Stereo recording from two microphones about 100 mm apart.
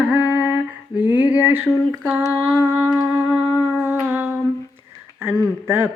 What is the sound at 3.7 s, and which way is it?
Humming, 20° right (ahead or behind).